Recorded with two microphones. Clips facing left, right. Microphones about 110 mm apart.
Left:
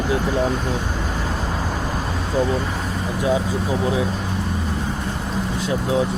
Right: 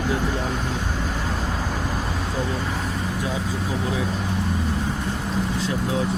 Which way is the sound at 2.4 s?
10° left (ahead or behind).